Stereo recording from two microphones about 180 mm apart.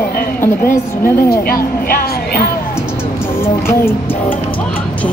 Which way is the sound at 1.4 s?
55° left (ahead or behind).